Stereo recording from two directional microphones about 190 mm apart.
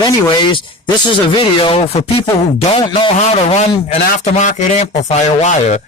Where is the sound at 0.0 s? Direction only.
25° left (ahead or behind).